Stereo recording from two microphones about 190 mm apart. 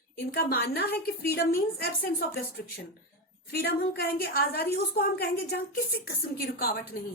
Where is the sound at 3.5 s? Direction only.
55° left (ahead or behind).